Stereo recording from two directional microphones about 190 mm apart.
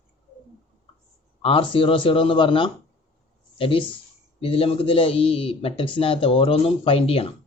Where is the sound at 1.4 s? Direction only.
30° left (ahead or behind).